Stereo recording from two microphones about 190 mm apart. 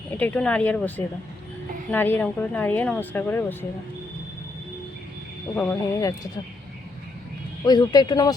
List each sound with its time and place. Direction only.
0.2 s speech: 5° left (ahead or behind)
5.5 s speech: 15° left (ahead or behind)
7.6 s speech: 20° left (ahead or behind)